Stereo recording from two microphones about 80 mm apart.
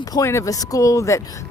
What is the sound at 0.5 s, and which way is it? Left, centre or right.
Speech, left.